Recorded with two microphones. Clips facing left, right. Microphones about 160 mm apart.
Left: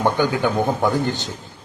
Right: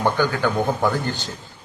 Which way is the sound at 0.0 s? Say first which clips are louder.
Left 1 dB; 15° left (ahead or behind).